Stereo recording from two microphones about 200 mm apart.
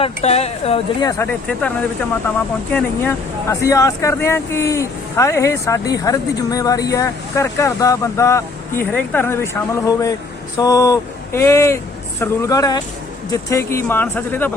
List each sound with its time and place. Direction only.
0.0 s speech: 30° left (ahead or behind)
1.0 s speech: 10° left (ahead or behind)
2.7 s speech: 10° left (ahead or behind)